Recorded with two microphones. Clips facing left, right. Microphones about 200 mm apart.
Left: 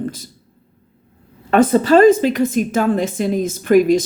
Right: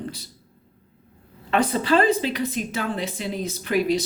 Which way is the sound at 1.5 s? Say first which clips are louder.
Left 8 dB; 45° left (ahead or behind).